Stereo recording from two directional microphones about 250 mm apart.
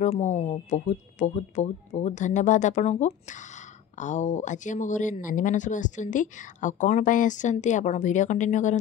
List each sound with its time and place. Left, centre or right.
0.0 s speech: left